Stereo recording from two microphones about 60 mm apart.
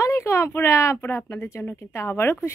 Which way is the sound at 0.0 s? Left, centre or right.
Left.